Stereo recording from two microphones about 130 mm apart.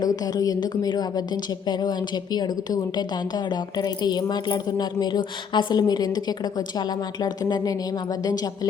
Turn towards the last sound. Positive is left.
turn(degrees=30)  # may be behind; listen again after turning